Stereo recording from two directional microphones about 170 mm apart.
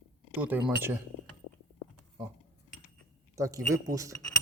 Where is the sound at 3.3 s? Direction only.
20° right (ahead or behind).